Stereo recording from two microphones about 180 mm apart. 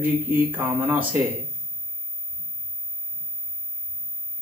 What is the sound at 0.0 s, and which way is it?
Speech, 10° right (ahead or behind).